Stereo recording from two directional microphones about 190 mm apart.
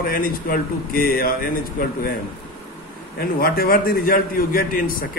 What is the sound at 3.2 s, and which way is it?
A man's voice, 50° left (ahead or behind).